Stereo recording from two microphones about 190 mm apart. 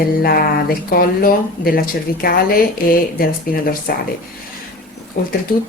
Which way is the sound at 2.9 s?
50° left (ahead or behind).